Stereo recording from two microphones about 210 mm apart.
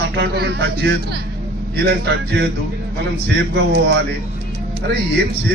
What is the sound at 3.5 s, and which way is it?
Speech, 50° right (ahead or behind).